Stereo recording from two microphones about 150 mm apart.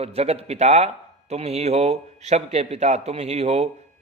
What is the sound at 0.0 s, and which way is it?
Speech, 45° right (ahead or behind).